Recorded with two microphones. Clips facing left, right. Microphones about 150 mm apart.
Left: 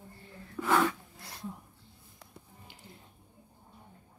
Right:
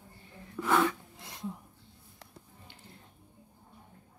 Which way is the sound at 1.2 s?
20° right (ahead or behind).